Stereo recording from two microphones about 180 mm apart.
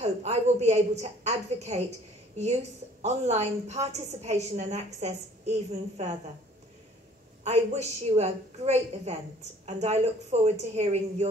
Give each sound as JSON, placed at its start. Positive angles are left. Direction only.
{"t": 0.0, "sound": "a woman's voice", "side_deg": -40}
{"t": 7.4, "sound": "a woman's voice", "side_deg": -35}